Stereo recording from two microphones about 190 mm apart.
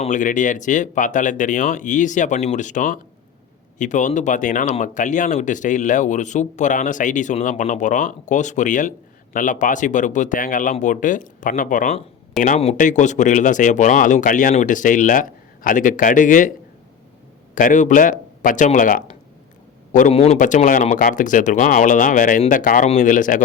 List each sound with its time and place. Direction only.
0.0 s speech: 40° left (ahead or behind)
17.5 s speech: 40° left (ahead or behind)